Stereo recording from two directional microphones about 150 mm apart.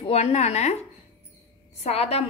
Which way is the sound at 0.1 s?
45° left (ahead or behind).